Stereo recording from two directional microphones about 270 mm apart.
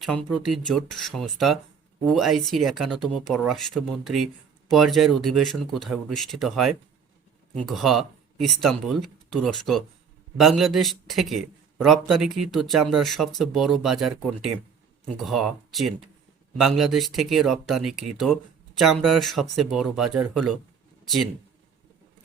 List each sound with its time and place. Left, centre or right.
0.0 s a man's voice: centre